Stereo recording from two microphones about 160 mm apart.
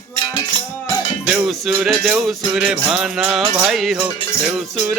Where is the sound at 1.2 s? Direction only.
5° right (ahead or behind).